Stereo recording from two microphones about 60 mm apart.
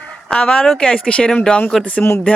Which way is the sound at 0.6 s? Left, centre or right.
Centre.